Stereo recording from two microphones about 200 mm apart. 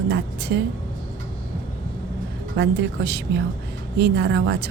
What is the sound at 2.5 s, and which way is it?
A woman's voice, 60° right (ahead or behind).